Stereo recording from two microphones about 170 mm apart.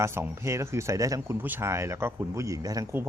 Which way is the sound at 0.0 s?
15° right (ahead or behind).